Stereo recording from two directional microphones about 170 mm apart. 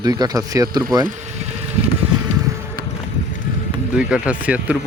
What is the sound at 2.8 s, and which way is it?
Run, 60° right (ahead or behind).